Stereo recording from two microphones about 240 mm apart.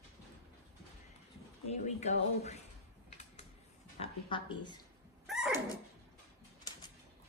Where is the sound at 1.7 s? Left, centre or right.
Left.